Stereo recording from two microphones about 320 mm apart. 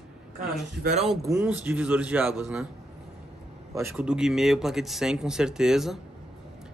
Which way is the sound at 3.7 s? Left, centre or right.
Centre.